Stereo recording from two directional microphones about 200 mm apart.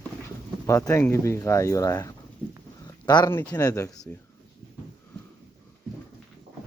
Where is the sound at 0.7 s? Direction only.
15° left (ahead or behind).